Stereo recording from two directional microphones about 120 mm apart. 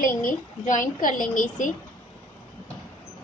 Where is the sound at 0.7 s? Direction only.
90° left.